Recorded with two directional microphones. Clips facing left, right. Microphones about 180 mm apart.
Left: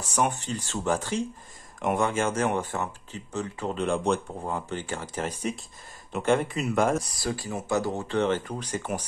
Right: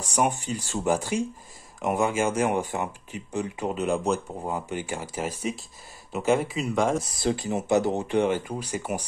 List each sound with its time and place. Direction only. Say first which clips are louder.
0.0 s speech: right 2 dB; 10° right (ahead or behind)
7.0 s speech: right 4 dB; 25° right (ahead or behind)